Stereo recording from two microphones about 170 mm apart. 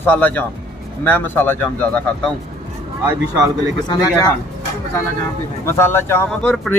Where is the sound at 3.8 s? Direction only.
20° left (ahead or behind).